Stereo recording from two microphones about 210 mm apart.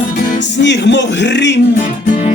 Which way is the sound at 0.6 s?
55° left (ahead or behind).